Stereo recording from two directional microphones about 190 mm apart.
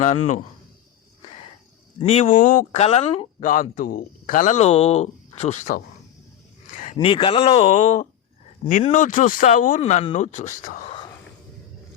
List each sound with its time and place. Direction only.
0.0 s speech: 40° left (ahead or behind)
2.0 s speech: 30° left (ahead or behind)
2.3 s speech: 45° left (ahead or behind)
3.4 s speech: 45° left (ahead or behind)
6.9 s a man's voice: 25° left (ahead or behind); by 10.9 s 45° left (ahead or behind)